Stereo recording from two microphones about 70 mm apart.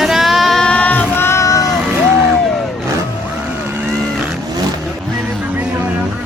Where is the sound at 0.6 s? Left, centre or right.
Centre.